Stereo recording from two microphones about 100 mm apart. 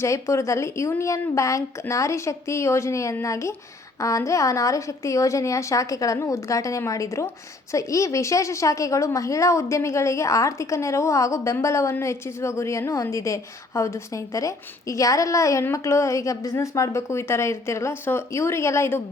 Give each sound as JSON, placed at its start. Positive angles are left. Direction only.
{"t": 0.0, "sound": "a woman's voice", "side_deg": 30}